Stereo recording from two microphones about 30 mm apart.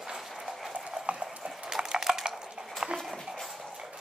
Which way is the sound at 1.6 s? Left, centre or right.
Right.